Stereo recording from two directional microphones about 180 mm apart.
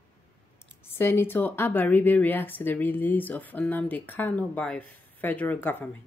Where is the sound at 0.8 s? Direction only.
10° left (ahead or behind).